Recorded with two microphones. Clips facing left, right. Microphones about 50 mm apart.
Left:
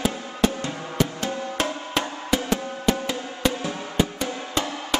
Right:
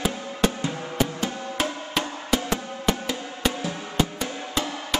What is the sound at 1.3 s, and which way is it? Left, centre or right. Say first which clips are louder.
Drum: left 3 dB; centre.